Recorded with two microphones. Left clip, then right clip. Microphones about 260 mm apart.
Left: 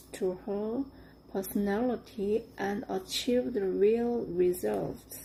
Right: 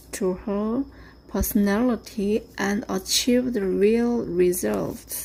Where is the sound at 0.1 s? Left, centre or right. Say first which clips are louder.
Right 7 dB; right.